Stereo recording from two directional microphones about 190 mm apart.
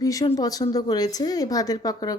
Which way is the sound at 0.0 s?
15° left (ahead or behind).